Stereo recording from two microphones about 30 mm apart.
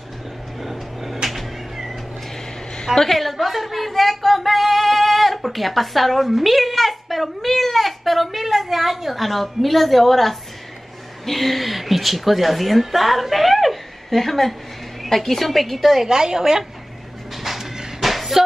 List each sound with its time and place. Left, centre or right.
0.6 s cat: centre
2.9 s a sound: centre
11.2 s a woman's voice: centre
16.1 s a woman's voice: right
17.4 s a sound: centre
18.0 s music: centre